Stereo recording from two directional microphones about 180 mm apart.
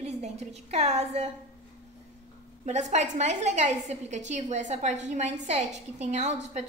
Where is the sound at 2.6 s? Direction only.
40° right (ahead or behind).